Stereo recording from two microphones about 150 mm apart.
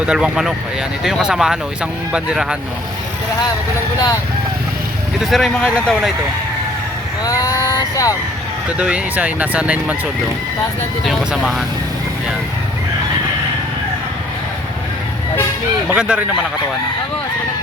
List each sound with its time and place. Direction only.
0.0 s speech: 5° right (ahead or behind)
5.2 s speech: centre (ahead or behind)
7.3 s speech: 25° left (ahead or behind)
8.8 s speech: 10° right (ahead or behind)
11.0 s speech: centre (ahead or behind)
15.9 s speech: 5° right (ahead or behind)